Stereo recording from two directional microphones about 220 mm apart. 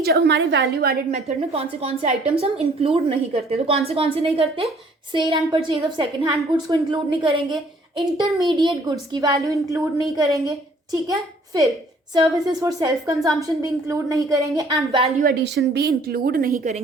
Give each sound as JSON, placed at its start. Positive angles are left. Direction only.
{"t": 0.0, "sound": "a woman's voice", "side_deg": -50}
{"t": 1.1, "sound": "a woman's voice", "side_deg": -25}
{"t": 15.2, "sound": "a woman's voice", "side_deg": -45}